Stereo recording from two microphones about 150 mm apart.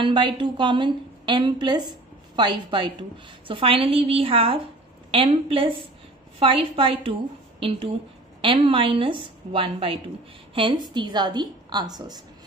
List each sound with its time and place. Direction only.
0.0 s a woman's voice: 35° right (ahead or behind)
8.4 s a woman's voice: 35° right (ahead or behind)